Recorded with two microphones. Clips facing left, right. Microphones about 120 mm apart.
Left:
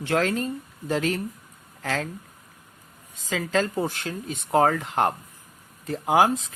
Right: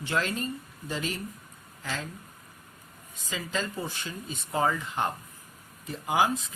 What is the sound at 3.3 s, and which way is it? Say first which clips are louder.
Speech: left 8 dB; 85° left.